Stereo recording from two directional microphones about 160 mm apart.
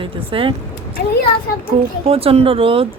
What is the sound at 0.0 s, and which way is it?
Speech, 35° right (ahead or behind).